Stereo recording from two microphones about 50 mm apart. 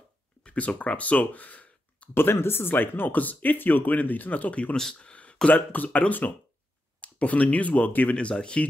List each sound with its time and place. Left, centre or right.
0.4 s speech: left
2.1 s speech: left
4.9 s a sound: left
5.5 s speech: left
8.2 s speech: centre